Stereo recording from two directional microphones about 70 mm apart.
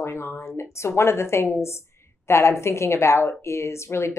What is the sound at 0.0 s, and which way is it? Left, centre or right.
A woman's voice, left.